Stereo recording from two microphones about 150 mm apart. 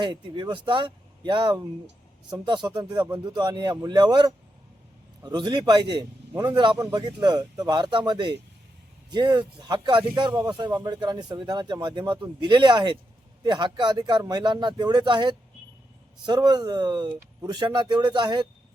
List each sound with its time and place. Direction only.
0.0 s a man's voice: 30° right (ahead or behind)